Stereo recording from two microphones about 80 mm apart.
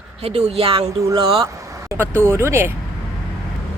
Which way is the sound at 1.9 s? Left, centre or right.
Right.